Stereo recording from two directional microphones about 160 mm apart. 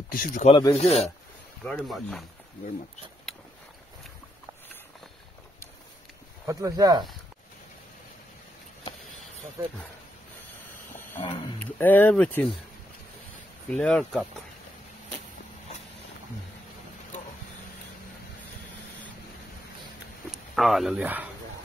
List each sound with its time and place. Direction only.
0.1 s speech: 55° left (ahead or behind)
0.7 s speech: 40° left (ahead or behind)
1.6 s speech: 5° left (ahead or behind)
3.3 s vehicle: centre (ahead or behind)
6.4 s speech: 20° right (ahead or behind)
9.6 s speech: 20° right (ahead or behind)
11.2 s speech: 30° left (ahead or behind)
11.6 s speech: 10° left (ahead or behind)
13.7 s speech: 5° left (ahead or behind)
20.2 s speech: centre (ahead or behind)